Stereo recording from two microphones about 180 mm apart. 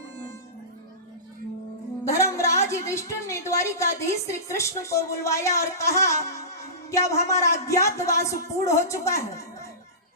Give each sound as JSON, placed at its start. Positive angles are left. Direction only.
{"t": 2.0, "sound": "a woman's voice", "side_deg": 15}